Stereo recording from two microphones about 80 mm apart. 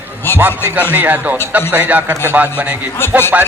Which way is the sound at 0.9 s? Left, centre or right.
Right.